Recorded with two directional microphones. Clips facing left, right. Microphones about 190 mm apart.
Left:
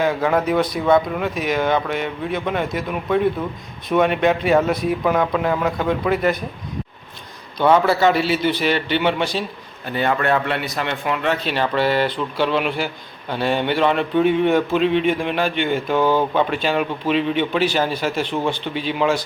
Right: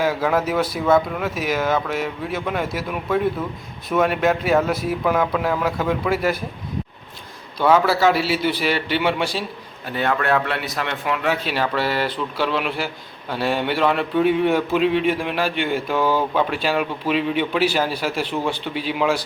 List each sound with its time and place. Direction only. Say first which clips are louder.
0.0 s speech: left 1 dB; 5° right (ahead or behind)
7.6 s speech: left 1 dB; centre (ahead or behind)